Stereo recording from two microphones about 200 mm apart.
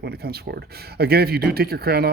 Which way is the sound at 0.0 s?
55° right (ahead or behind).